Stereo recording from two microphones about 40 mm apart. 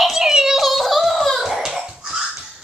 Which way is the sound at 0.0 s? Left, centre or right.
Centre.